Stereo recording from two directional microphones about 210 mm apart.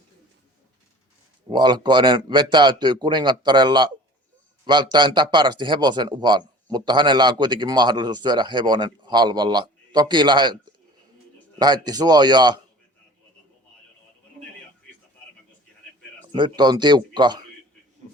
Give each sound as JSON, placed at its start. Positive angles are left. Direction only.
{"t": 1.5, "sound": "a man's voice", "side_deg": -20}
{"t": 16.3, "sound": "a man's voice", "side_deg": -20}